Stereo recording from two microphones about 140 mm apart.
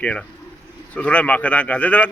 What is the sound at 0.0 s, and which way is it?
Speech, 10° left (ahead or behind).